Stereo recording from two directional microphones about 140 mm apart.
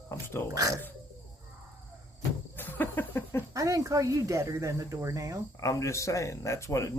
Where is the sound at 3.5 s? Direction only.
25° right (ahead or behind).